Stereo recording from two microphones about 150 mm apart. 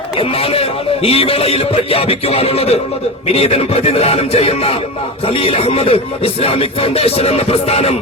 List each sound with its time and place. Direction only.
0.2 s speech: 40° left (ahead or behind)